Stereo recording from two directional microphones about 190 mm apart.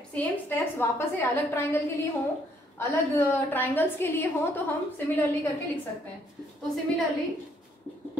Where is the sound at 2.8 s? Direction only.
10° left (ahead or behind).